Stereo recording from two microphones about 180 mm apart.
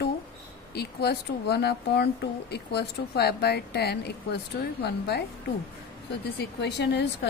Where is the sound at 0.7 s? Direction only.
65° left (ahead or behind).